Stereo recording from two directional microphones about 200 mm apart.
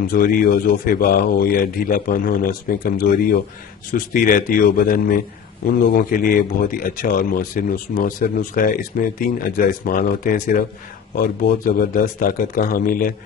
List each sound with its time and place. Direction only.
0.1 s speech: 45° left (ahead or behind)